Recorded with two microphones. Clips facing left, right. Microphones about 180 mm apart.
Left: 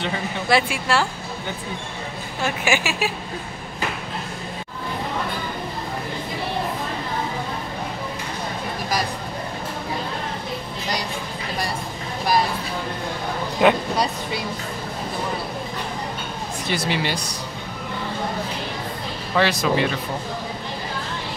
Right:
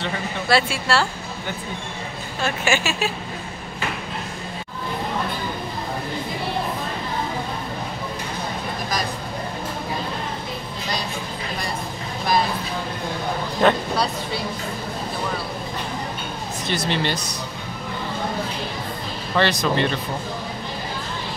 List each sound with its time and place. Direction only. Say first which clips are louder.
0.5 s a woman's voice: even; 15° left (ahead or behind)
2.4 s a woman's voice: even; 15° left (ahead or behind)
13.6 s a sound: left 1 dB; 10° left (ahead or behind)
16.6 s speech: right 1 dB; 10° left (ahead or behind)
19.3 s a woman's voice: even; 5° left (ahead or behind)